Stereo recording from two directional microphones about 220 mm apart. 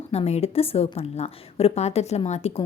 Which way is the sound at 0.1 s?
30° left (ahead or behind).